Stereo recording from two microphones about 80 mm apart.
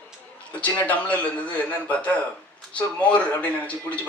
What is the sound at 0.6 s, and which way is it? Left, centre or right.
Speech, centre.